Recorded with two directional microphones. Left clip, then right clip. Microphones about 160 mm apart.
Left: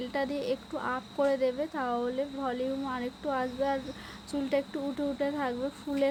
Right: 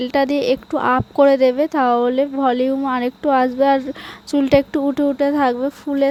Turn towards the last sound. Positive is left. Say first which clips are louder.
# right 12 dB
turn(degrees=-55)  # may be behind; listen again after turning